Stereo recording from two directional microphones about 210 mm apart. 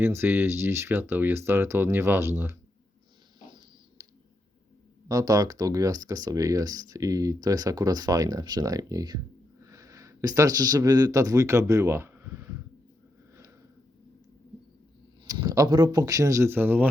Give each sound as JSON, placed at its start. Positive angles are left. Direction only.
{"t": 0.0, "sound": "speech", "side_deg": -10}
{"t": 5.0, "sound": "speech", "side_deg": -15}
{"t": 15.3, "sound": "speech", "side_deg": -15}